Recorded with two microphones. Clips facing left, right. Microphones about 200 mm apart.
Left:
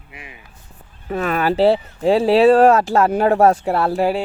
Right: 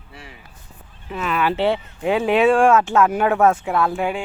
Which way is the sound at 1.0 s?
45° left (ahead or behind).